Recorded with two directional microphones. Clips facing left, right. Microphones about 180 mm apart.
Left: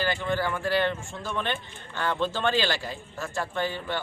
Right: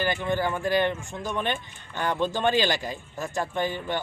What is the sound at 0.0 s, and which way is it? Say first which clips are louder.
Speech: right 1 dB; 15° right (ahead or behind).